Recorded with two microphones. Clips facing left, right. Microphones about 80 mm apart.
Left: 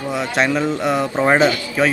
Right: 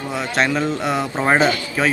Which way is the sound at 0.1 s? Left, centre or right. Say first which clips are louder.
Left 1 dB; centre.